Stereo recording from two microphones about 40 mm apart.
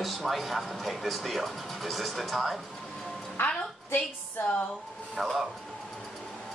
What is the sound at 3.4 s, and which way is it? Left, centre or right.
Music, left.